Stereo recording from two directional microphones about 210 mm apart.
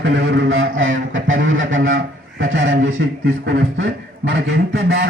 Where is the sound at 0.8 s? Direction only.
70° right (ahead or behind).